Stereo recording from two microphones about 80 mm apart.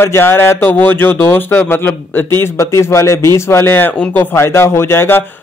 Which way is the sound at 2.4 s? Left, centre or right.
Left.